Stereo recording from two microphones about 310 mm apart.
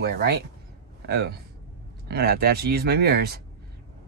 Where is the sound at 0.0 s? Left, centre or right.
Right.